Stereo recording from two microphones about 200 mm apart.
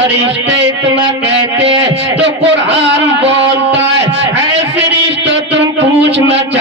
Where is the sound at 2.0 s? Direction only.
65° right (ahead or behind).